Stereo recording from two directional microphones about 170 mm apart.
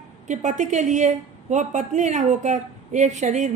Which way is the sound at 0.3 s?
45° right (ahead or behind).